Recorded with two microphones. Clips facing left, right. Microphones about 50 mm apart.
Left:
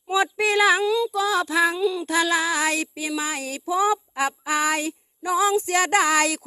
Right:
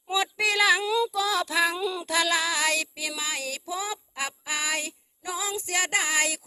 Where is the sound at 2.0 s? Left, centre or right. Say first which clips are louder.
Left 1 dB; centre; by 5.5 s left.